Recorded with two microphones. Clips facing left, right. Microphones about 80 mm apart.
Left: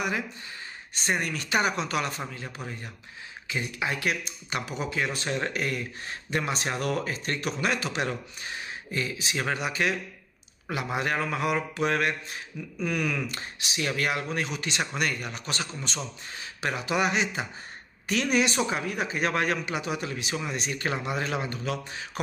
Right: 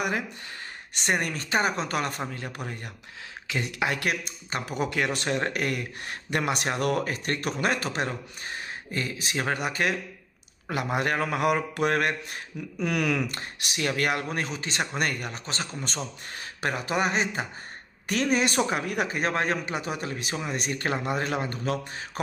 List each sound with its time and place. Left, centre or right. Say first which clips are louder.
1.0 s speech: right 2 dB; right
1.3 s speech: even; right
3.4 s speech: right 2 dB; right
4.5 s speech: right 1 dB; right
4.7 s speech: right 4 dB; right
19.2 s speech: left 3 dB; right